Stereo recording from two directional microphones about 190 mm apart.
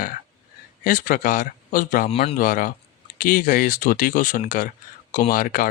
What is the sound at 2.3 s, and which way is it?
Speech, 45° left (ahead or behind).